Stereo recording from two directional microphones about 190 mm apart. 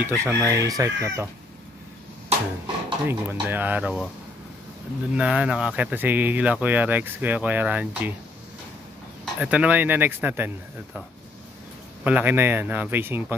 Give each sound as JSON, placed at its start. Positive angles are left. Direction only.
{"t": 0.0, "sound": "speech", "side_deg": -15}
{"t": 2.6, "sound": "speech", "side_deg": -10}
{"t": 5.1, "sound": "speech", "side_deg": -5}
{"t": 9.2, "sound": "speech", "side_deg": -5}
{"t": 12.0, "sound": "speech", "side_deg": -10}